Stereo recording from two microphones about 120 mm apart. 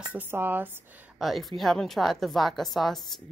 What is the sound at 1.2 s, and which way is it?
A woman's voice, centre (ahead or behind).